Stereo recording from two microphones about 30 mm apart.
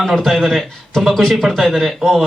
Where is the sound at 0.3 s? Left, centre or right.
Centre.